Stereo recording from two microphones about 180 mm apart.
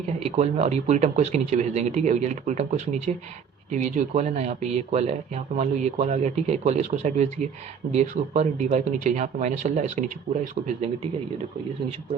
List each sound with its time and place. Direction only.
0.2 s speech: 35° right (ahead or behind)